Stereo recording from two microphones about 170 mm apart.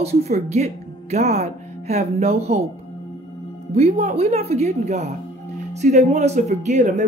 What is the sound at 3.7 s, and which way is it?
Speech, 40° right (ahead or behind).